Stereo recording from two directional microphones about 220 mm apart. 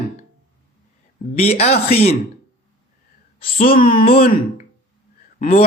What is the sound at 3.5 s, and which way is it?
A man's voice, 40° left (ahead or behind).